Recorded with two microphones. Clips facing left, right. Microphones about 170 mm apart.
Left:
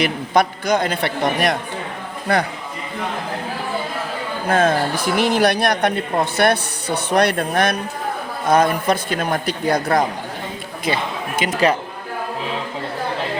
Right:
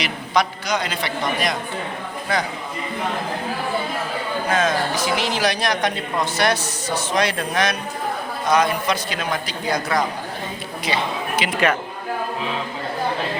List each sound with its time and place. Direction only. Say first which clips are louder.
0.0 s a man's voice: left 4 dB; 55° left (ahead or behind)
4.4 s a man's voice: left 4 dB; 55° left (ahead or behind)